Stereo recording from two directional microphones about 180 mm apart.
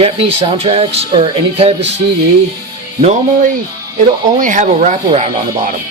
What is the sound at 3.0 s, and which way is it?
Speech, 45° right (ahead or behind).